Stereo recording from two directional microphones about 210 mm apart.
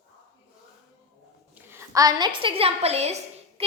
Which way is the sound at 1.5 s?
10° right (ahead or behind).